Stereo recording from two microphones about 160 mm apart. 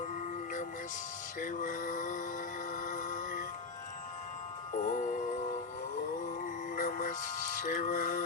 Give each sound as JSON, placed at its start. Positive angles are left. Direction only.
{"t": 1.4, "sound": "music", "side_deg": 55}
{"t": 4.7, "sound": "music", "side_deg": 50}
{"t": 6.2, "sound": "music", "side_deg": 55}